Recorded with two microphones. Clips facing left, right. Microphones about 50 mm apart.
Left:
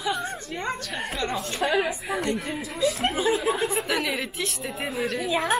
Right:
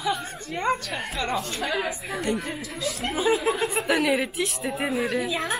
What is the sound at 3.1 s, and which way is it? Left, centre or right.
Speech, centre.